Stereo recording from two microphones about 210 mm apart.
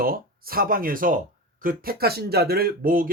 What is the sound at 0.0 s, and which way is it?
Speech, 45° right (ahead or behind).